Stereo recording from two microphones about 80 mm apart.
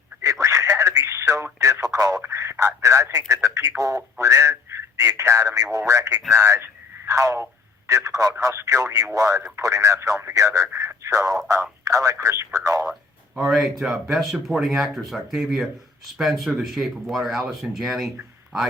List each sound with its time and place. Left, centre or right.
0.2 s radio: right
2.2 s speech: right
10.3 s speech: right
10.8 s a sound: right
11.9 s speech: right
12.8 s speech: centre